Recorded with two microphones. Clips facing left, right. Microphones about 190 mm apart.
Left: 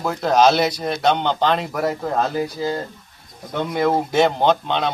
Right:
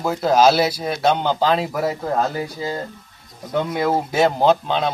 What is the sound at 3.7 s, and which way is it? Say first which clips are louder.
A man's voice: left 4 dB; 5° right (ahead or behind).